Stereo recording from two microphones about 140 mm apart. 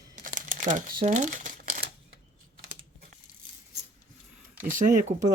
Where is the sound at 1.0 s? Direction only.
60° right (ahead or behind).